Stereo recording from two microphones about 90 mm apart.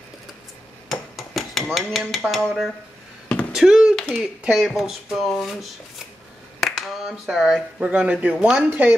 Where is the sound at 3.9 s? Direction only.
5° left (ahead or behind).